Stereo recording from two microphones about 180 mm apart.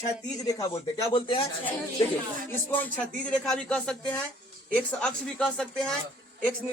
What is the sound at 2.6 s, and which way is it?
Speech, 10° left (ahead or behind).